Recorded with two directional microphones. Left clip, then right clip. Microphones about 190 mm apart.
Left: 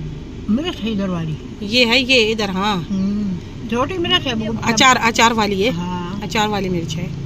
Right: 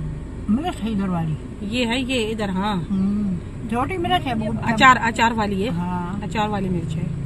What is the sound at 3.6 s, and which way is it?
Speech, 45° right (ahead or behind).